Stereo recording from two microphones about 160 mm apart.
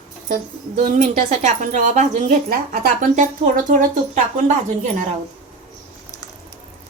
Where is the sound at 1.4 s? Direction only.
50° right (ahead or behind).